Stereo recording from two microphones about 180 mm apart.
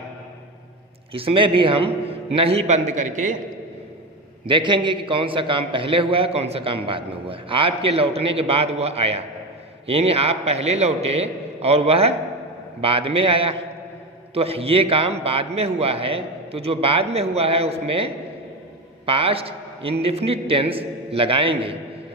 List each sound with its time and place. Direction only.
1.1 s a man's voice: 30° right (ahead or behind)
4.4 s a man's voice: 25° right (ahead or behind)